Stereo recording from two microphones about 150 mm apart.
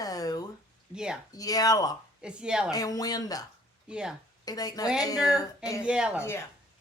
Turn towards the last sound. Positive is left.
turn(degrees=15)  # may be behind; listen again after turning